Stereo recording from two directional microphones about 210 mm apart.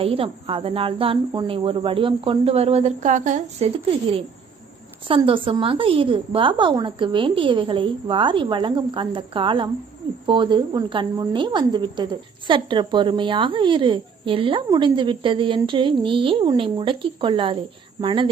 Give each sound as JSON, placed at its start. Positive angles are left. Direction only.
{"t": 0.0, "sound": "a woman's voice", "side_deg": -25}
{"t": 5.0, "sound": "a woman's voice", "side_deg": -25}